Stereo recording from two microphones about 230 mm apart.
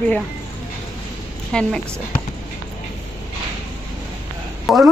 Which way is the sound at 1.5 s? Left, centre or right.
Centre.